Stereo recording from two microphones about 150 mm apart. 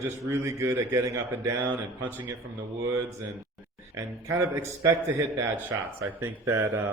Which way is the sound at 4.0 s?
20° right (ahead or behind).